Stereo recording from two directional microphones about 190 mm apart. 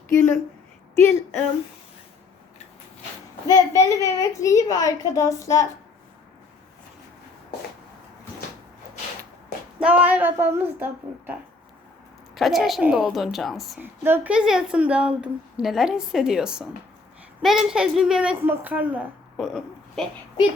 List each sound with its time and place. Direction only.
0.1 s speech: 10° left (ahead or behind)
3.4 s a woman's voice: 15° left (ahead or behind)
9.8 s speech: 10° right (ahead or behind)
12.3 s a woman's voice: centre (ahead or behind)